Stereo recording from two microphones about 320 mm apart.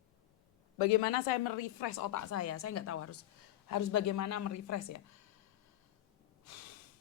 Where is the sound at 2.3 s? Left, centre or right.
Left.